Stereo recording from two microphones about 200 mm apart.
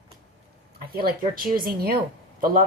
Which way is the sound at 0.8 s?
50° right (ahead or behind).